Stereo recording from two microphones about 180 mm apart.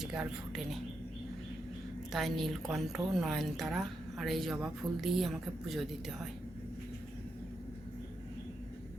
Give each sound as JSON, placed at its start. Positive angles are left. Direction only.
{"t": 0.0, "sound": "a woman's voice", "side_deg": -5}
{"t": 2.1, "sound": "a woman's voice", "side_deg": 0}